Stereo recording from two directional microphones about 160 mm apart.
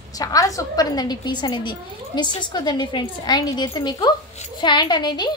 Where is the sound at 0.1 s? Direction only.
20° left (ahead or behind).